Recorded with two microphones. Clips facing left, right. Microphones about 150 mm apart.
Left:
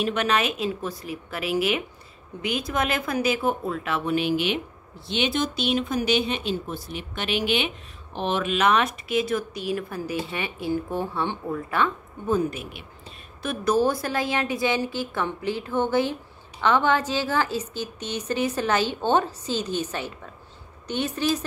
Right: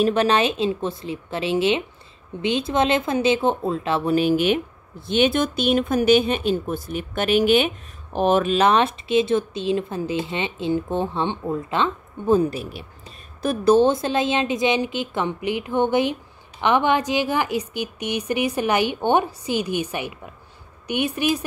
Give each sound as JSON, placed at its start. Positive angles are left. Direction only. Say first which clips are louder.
{"t": 0.0, "sound": "a woman's voice", "louder": "right 5 dB", "side_deg": -30}